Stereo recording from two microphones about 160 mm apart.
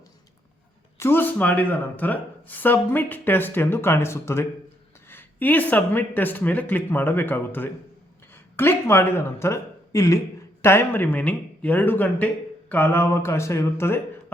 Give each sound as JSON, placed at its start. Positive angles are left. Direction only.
{"t": 0.9, "sound": "speech", "side_deg": 15}